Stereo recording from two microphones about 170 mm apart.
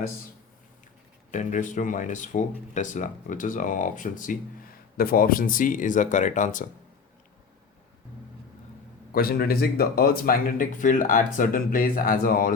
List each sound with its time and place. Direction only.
1.3 s speech: 45° left (ahead or behind)
9.1 s speech: 60° left (ahead or behind)